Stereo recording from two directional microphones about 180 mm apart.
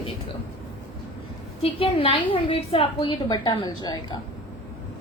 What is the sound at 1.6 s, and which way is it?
A woman's voice, 30° left (ahead or behind).